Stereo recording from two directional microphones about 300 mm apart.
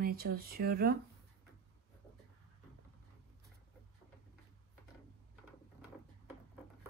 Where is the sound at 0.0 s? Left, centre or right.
Right.